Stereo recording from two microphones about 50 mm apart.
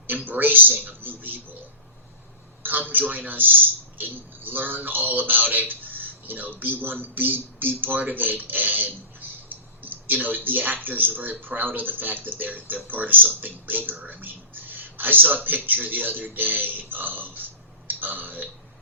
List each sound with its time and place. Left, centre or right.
0.1 s speech: right
2.6 s speech: right
17.8 s burping: right